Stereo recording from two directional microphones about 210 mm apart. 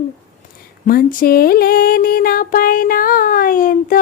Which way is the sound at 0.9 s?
45° left (ahead or behind).